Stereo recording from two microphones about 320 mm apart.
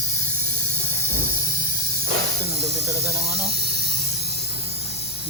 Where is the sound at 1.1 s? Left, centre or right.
Centre.